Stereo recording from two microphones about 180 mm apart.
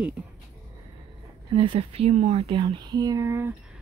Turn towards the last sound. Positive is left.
turn(degrees=-15)  # may be behind; listen again after turning